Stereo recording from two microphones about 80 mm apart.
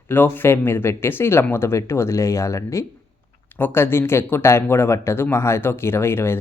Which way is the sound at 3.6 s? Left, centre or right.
Left.